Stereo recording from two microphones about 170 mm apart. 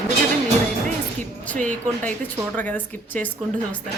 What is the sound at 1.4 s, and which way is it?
A woman's voice, 10° left (ahead or behind).